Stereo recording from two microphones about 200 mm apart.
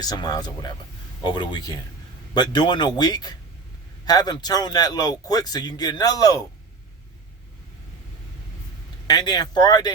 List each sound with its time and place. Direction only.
0.0 s speech: 20° left (ahead or behind)
9.0 s speech: 20° left (ahead or behind)